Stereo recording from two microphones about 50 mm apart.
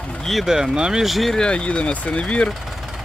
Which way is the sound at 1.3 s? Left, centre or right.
Centre.